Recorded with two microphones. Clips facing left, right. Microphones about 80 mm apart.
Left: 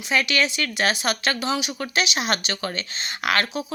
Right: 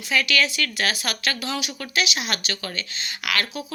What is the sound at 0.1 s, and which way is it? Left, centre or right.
Speech, left.